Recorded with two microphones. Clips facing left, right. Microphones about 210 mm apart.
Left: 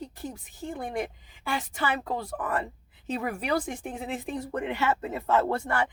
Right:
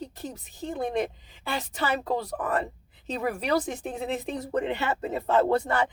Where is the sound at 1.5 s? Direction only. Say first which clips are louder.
Right 1 dB; 40° right (ahead or behind).